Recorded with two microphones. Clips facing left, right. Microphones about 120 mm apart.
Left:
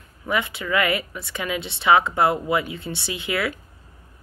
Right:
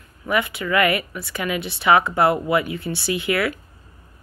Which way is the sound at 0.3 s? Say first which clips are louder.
Right 2 dB; 25° left (ahead or behind).